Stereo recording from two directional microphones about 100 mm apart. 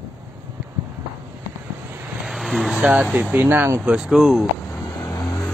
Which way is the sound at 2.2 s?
Centre (ahead or behind).